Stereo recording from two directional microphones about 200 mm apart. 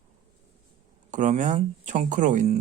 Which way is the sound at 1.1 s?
40° right (ahead or behind).